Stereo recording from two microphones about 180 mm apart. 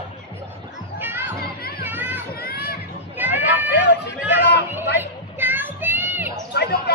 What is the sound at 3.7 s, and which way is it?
Hubbub, 70° left (ahead or behind).